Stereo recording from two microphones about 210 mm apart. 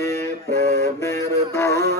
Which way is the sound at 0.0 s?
15° left (ahead or behind).